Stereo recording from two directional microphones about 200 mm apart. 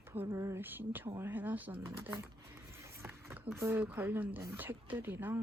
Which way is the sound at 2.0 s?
15° right (ahead or behind).